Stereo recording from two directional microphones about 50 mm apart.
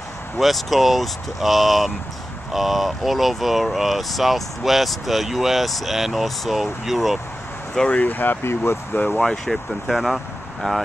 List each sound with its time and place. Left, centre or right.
0.4 s speech: centre
7.9 s speech: left
9.2 s speech: centre